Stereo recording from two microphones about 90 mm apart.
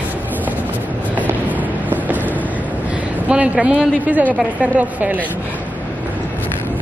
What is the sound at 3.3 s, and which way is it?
A woman's voice, 15° right (ahead or behind).